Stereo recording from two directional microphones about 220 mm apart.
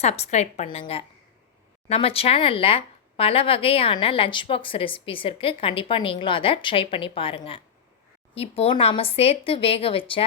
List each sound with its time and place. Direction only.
0.0 s speech: 30° left (ahead or behind)